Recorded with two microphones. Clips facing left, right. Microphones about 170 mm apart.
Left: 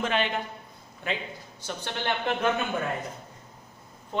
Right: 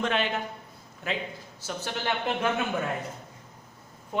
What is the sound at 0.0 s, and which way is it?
A man's voice, centre (ahead or behind).